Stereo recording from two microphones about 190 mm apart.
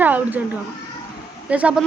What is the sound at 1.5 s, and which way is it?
Speech, 5° right (ahead or behind).